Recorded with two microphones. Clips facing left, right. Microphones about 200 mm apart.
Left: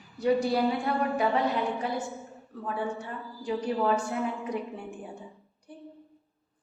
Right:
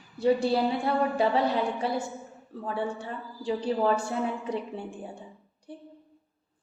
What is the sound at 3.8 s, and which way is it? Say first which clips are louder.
A woman's voice: right 1 dB; 35° right (ahead or behind).